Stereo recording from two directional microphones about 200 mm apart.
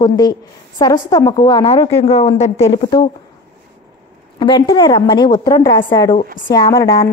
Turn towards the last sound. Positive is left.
turn(degrees=20)  # may be behind; listen again after turning